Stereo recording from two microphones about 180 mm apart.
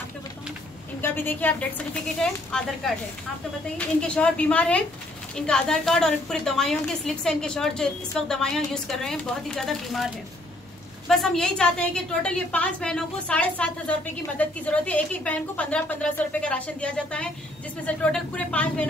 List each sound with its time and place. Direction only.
1.0 s a woman's voice: 10° left (ahead or behind)
3.7 s a woman's voice: 5° left (ahead or behind)
11.1 s a woman's voice: 5° left (ahead or behind)